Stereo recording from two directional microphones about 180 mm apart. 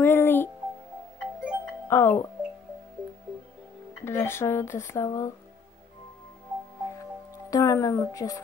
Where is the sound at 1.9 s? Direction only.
10° left (ahead or behind).